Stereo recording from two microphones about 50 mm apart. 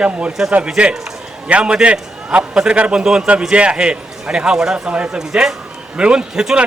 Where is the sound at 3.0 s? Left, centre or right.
Centre.